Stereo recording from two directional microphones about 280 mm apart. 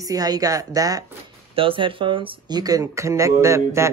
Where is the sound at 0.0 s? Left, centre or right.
Centre.